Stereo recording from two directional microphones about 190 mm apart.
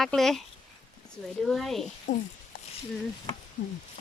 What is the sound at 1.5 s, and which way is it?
Speech, centre (ahead or behind).